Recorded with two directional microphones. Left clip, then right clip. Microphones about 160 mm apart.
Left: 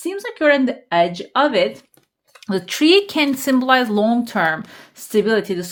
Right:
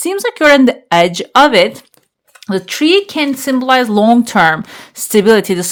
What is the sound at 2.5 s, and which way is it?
Speech, 15° right (ahead or behind).